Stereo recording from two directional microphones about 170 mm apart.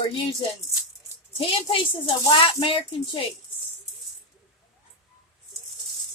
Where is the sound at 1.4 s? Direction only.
30° left (ahead or behind).